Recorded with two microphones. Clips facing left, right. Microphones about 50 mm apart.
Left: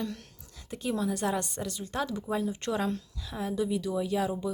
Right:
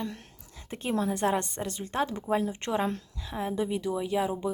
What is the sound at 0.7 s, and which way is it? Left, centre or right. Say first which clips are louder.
A woman's voice: right 1 dB; right.